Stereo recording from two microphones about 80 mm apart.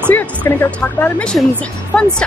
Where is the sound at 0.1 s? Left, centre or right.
Left.